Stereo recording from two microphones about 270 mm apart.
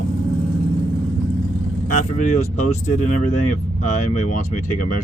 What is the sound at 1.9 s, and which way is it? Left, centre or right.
Speech, left.